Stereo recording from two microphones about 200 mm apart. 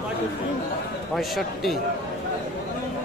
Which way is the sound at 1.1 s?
Centre (ahead or behind).